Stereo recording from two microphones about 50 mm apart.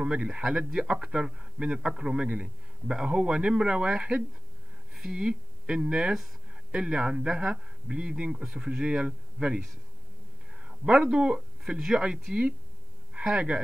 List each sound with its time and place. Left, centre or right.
0.0 s a man's voice: centre
4.9 s a sound: centre
5.2 s a man's voice: centre